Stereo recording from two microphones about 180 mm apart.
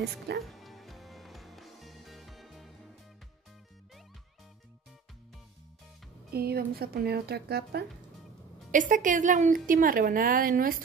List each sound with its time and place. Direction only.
0.4 s music: centre (ahead or behind)
6.3 s speech: 60° right (ahead or behind)
8.7 s a woman's voice: 45° right (ahead or behind)